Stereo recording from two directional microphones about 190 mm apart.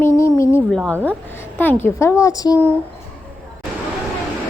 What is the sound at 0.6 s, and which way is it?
A woman's voice, 5° left (ahead or behind).